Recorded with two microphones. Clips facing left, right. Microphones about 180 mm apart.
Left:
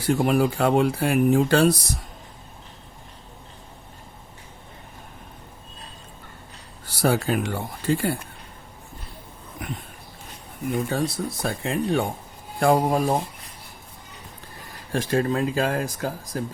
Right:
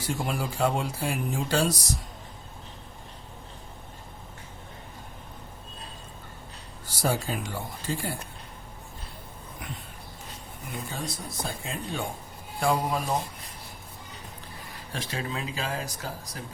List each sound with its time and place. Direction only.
0.0 s speech: 60° left (ahead or behind)
6.8 s speech: 65° left (ahead or behind)
10.8 s speech: 70° left (ahead or behind)
12.5 s speech: 50° left (ahead or behind)
14.6 s speech: 45° left (ahead or behind)